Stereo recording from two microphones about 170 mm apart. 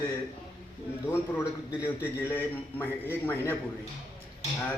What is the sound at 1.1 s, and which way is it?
Speech, 15° left (ahead or behind).